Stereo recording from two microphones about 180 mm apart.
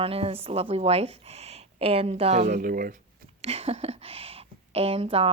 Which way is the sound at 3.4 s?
35° right (ahead or behind).